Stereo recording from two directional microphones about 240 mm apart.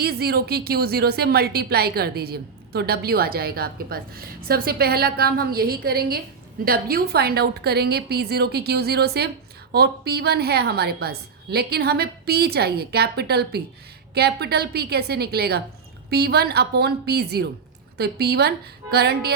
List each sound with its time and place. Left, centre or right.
0.0 s a woman's voice: right